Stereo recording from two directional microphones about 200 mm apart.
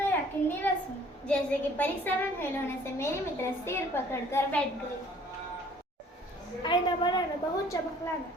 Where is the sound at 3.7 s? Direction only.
15° left (ahead or behind).